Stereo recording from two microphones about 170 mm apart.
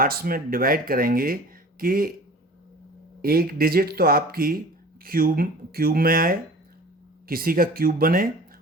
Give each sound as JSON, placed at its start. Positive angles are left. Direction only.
{"t": 0.0, "sound": "speech", "side_deg": -60}
{"t": 3.2, "sound": "speech", "side_deg": -60}